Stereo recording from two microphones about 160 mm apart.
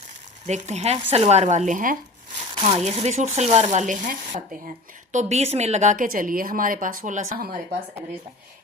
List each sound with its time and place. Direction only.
0.4 s speech: 45° right (ahead or behind)
2.6 s speech: 40° right (ahead or behind)
5.1 s a woman's voice: 45° right (ahead or behind); by 7.8 s 65° right (ahead or behind)